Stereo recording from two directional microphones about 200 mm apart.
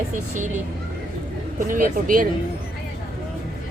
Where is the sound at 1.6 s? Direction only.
45° right (ahead or behind).